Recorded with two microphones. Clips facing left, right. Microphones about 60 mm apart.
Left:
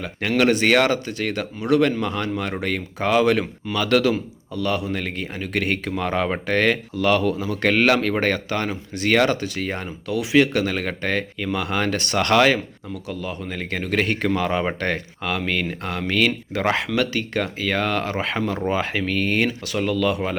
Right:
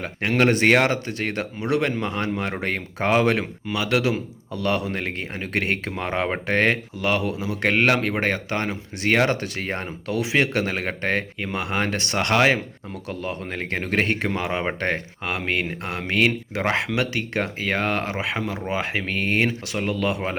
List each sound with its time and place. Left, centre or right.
0.0 s speech: right; by 4.2 s centre
4.5 s speech: right
9.4 s speech: right; by 12.6 s centre
12.9 s speech: right
18.2 s speech: centre
18.7 s speech: right